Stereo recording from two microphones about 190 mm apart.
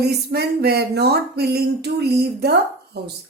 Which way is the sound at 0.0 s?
60° right (ahead or behind).